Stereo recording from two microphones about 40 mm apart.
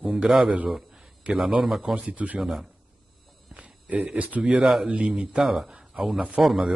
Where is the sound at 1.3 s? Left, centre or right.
Right.